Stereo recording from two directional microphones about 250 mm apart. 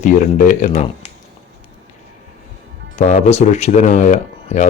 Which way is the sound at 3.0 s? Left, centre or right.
Left.